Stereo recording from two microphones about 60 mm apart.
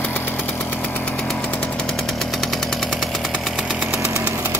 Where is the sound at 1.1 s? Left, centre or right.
Centre.